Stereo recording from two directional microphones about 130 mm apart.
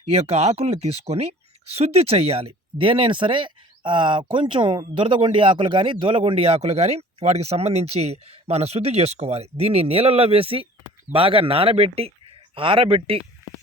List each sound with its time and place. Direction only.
0.1 s a woman's voice: 50° right (ahead or behind)